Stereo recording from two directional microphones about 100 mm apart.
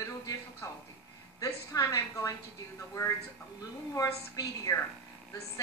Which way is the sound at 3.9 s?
35° left (ahead or behind).